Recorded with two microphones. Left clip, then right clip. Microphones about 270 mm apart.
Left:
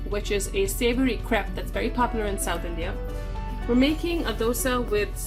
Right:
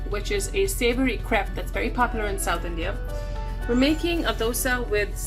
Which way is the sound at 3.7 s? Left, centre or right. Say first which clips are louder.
Right 1 dB; left.